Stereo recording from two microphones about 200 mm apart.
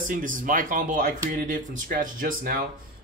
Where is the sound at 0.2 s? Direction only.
40° right (ahead or behind).